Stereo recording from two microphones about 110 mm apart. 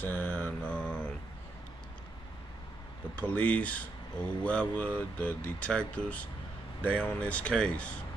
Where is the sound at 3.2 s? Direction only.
15° left (ahead or behind).